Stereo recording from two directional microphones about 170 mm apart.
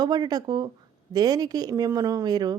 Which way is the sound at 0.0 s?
25° right (ahead or behind).